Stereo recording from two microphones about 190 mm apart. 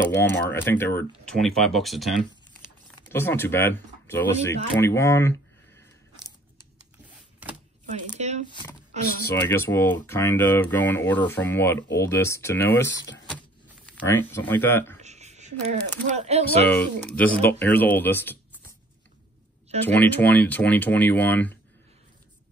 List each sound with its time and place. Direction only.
0.0 s speech: 10° left (ahead or behind)
3.1 s speech: 10° left (ahead or behind)
8.2 s speech: 35° right (ahead or behind)
9.3 s speech: 10° left (ahead or behind)
12.9 s speech: 65° left (ahead or behind)
13.8 s speech: 10° left (ahead or behind)
15.0 s speech: 35° right (ahead or behind)
16.6 s speech: 10° left (ahead or behind)
19.8 s speech: 10° left (ahead or behind)